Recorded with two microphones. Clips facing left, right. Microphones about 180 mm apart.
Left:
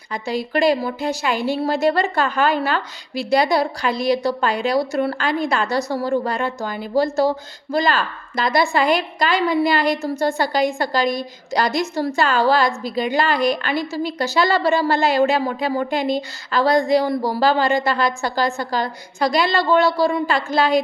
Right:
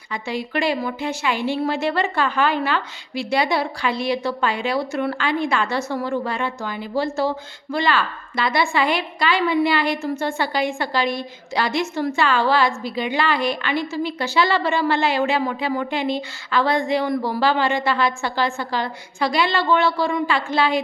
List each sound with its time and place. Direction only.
0.1 s a woman's voice: 40° left (ahead or behind)